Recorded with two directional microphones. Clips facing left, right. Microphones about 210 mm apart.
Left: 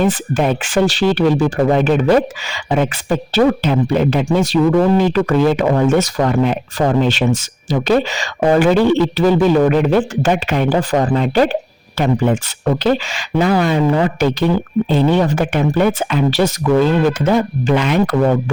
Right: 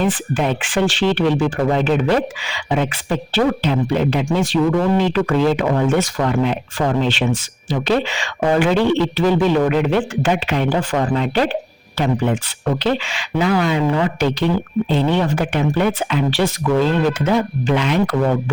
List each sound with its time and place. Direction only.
0.0 s speech: 45° left (ahead or behind)